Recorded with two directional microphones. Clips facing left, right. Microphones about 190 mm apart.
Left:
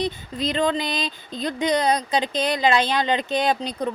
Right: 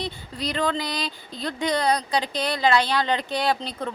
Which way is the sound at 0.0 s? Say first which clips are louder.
Left 5 dB; 20° left (ahead or behind).